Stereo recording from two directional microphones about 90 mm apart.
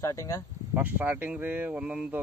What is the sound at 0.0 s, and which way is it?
Speech, 40° left (ahead or behind).